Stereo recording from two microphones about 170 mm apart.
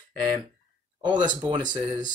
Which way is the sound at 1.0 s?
25° right (ahead or behind).